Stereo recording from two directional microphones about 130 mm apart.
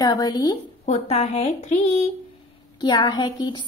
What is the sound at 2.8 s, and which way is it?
Speech, 35° left (ahead or behind).